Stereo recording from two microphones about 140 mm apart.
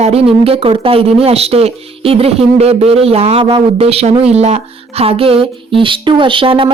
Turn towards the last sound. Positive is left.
turn(degrees=-40)  # may be behind; listen again after turning